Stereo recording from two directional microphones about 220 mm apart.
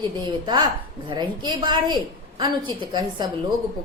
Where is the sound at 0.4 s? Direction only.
20° right (ahead or behind).